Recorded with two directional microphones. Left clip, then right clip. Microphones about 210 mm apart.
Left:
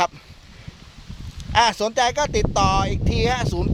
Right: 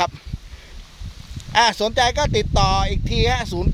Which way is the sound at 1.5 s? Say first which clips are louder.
Right 1 dB; 10° right (ahead or behind).